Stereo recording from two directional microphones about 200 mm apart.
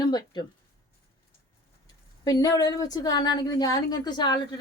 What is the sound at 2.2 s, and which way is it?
A woman's voice, 20° left (ahead or behind).